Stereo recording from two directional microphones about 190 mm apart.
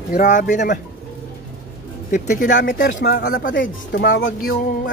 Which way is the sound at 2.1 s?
40° left (ahead or behind).